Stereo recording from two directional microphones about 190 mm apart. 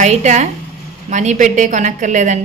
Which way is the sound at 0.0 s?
40° right (ahead or behind).